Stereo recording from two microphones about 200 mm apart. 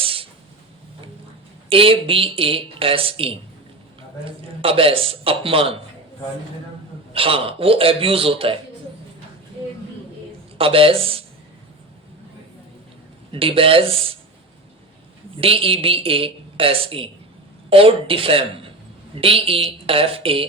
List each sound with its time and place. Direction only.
0.0 s a sound: 25° right (ahead or behind)
1.7 s a woman's voice: 25° right (ahead or behind)
7.1 s a woman's voice: 25° right (ahead or behind)
10.6 s a woman's voice: 25° right (ahead or behind)
13.3 s a woman's voice: 25° right (ahead or behind)
15.4 s a woman's voice: 30° right (ahead or behind)